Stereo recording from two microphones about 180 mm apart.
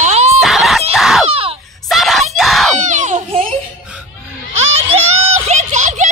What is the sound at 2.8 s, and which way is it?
Baby cry, 40° right (ahead or behind).